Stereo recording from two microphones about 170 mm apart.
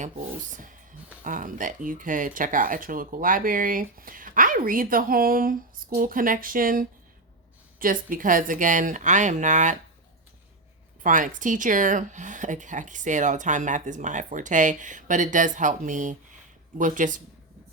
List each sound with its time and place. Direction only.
1.2 s speech: 50° right (ahead or behind)
11.0 s speech: 50° right (ahead or behind)